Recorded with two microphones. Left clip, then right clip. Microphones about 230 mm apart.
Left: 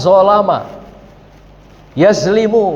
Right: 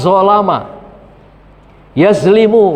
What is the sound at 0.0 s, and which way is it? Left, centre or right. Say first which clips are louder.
Speech: even; right.